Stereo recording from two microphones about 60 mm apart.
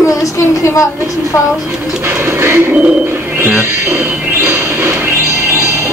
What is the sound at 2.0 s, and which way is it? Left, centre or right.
Music, right.